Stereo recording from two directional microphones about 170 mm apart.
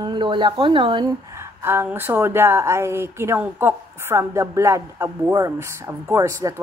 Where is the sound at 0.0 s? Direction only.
30° right (ahead or behind).